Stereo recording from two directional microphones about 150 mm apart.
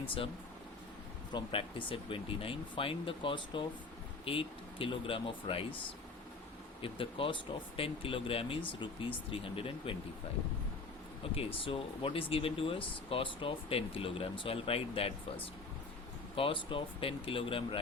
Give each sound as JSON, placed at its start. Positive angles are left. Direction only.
{"t": 1.3, "sound": "speech", "side_deg": 30}
{"t": 6.8, "sound": "speech", "side_deg": 35}
{"t": 11.3, "sound": "speech", "side_deg": 35}
{"t": 16.3, "sound": "speech", "side_deg": 35}